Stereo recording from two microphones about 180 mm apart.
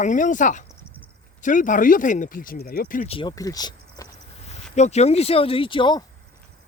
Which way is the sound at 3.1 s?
25° left (ahead or behind).